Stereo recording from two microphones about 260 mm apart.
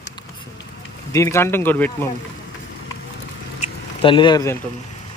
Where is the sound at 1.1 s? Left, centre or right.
Centre.